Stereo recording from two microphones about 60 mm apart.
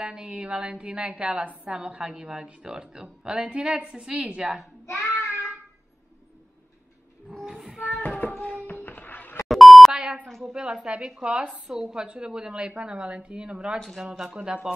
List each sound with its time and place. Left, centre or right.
0.0 s a woman's voice: centre
4.8 s child singing: left
7.2 s a sound: centre
8.2 s a sound: left
9.5 s beep: centre
10.2 s a woman's voice: centre
10.5 s a woman's voice: centre
13.7 s a woman's voice: centre
14.3 s a woman's voice: centre